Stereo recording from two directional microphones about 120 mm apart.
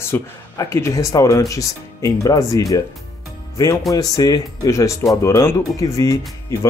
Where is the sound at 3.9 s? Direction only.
30° left (ahead or behind).